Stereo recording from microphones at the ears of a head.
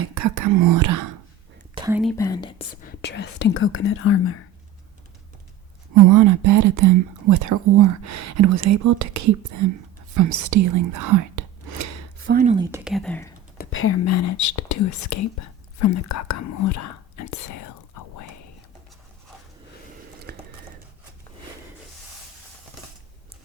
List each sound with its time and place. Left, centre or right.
0.0 s speech: right
2.8 s speech: left
5.9 s speech: right
12.8 s speech: centre
13.7 s speech: left
20.0 s typing: right